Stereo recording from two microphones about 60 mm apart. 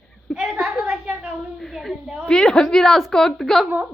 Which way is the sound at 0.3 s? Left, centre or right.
Centre.